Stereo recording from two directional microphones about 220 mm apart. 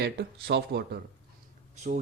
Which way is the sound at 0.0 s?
50° right (ahead or behind).